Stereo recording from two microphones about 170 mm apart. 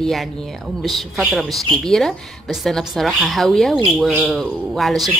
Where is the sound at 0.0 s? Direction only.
Centre (ahead or behind).